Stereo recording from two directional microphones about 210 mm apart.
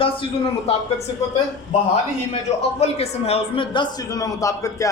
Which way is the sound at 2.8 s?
30° left (ahead or behind).